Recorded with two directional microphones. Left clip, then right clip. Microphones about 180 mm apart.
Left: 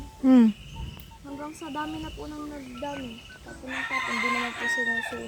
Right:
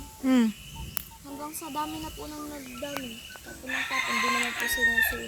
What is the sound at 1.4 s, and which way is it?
Speech, 5° left (ahead or behind).